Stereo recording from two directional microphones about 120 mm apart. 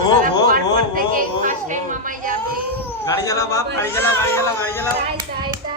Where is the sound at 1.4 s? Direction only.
90° right.